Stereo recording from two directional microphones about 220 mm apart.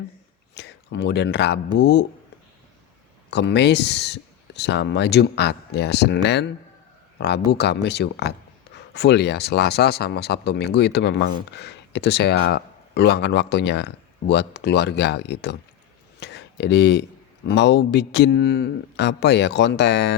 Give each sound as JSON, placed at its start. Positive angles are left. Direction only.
{"t": 0.5, "sound": "speech", "side_deg": 50}
{"t": 3.2, "sound": "speech", "side_deg": 50}